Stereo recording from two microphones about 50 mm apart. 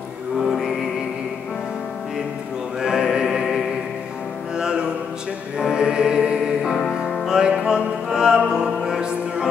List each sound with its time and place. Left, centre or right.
2.8 s music: centre
4.6 s music: centre